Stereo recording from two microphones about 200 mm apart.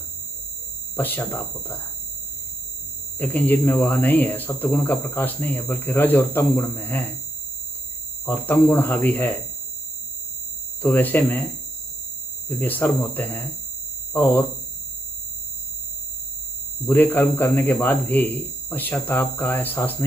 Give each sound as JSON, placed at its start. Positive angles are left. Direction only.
{"t": 0.9, "sound": "speech", "side_deg": 10}
{"t": 3.2, "sound": "speech", "side_deg": 10}
{"t": 8.3, "sound": "speech", "side_deg": 10}
{"t": 10.8, "sound": "speech", "side_deg": 10}
{"t": 12.4, "sound": "speech", "side_deg": 10}
{"t": 16.8, "sound": "speech", "side_deg": 10}